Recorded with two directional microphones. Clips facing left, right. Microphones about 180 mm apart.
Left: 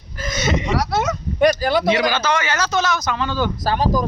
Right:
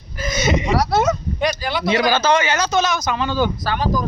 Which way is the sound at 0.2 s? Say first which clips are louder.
Right 2 dB; 10° right (ahead or behind).